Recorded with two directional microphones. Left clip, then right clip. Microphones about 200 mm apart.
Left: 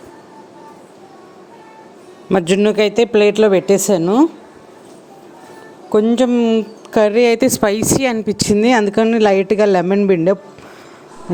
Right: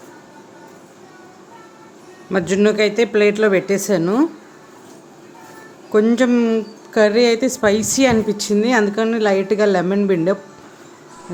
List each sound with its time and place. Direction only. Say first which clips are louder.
2.3 s speech: left 3 dB; 35° left (ahead or behind); by 4.3 s 15° left (ahead or behind)
5.9 s speech: left 1 dB; 20° left (ahead or behind)
6.9 s speech: left 2 dB; 35° left (ahead or behind)